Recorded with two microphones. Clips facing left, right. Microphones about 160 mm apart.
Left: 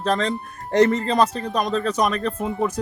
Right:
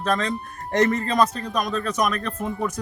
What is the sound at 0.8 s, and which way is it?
Speech, 30° left (ahead or behind).